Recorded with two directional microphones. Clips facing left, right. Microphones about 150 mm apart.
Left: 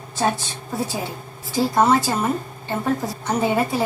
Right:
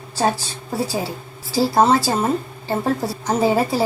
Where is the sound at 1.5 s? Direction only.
35° right (ahead or behind).